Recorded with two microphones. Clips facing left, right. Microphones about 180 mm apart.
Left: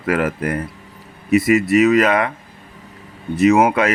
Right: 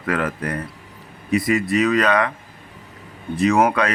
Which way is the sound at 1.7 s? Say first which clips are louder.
Left 3 dB; 25° left (ahead or behind).